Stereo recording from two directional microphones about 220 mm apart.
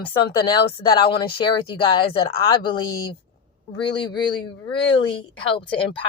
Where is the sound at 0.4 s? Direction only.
20° left (ahead or behind).